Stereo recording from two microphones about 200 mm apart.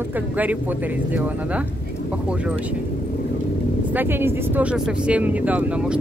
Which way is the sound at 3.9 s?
10° right (ahead or behind).